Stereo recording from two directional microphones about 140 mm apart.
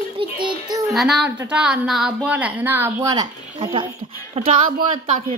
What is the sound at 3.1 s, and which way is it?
A woman's voice, 30° right (ahead or behind).